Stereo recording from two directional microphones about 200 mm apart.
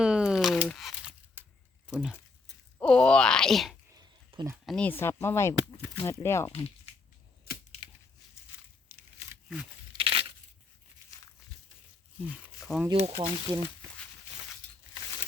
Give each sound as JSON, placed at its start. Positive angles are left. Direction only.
{"t": 0.0, "sound": "crumpling", "side_deg": -5}
{"t": 1.9, "sound": "speech", "side_deg": -5}
{"t": 4.3, "sound": "a sound", "side_deg": -20}
{"t": 4.6, "sound": "speech", "side_deg": 5}
{"t": 6.5, "sound": "speech", "side_deg": 30}
{"t": 7.5, "sound": "wood", "side_deg": 50}
{"t": 8.5, "sound": "a sound", "side_deg": 10}
{"t": 10.0, "sound": "crushing", "side_deg": -25}
{"t": 12.2, "sound": "speech", "side_deg": -5}
{"t": 12.9, "sound": "speech", "side_deg": -25}